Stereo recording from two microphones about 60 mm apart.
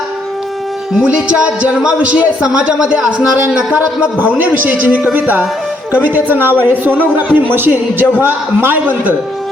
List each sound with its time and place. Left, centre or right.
0.9 s a man's voice: centre
4.2 s a man's voice: right